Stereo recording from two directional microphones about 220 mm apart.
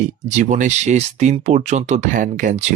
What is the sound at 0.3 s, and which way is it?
Speech, 35° right (ahead or behind).